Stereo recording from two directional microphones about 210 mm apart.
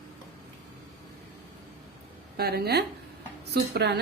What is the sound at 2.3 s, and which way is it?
A woman's voice, 50° right (ahead or behind).